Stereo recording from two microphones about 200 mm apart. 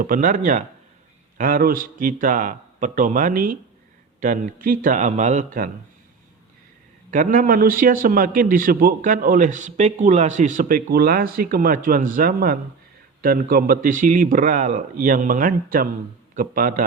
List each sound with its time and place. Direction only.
0.0 s a man's voice: 40° right (ahead or behind)
7.1 s a man's voice: 45° right (ahead or behind)